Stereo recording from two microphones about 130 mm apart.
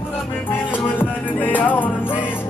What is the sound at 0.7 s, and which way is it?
Music, 15° left (ahead or behind).